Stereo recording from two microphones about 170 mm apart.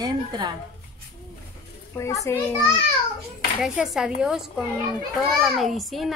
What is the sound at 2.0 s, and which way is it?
Speech, 20° left (ahead or behind).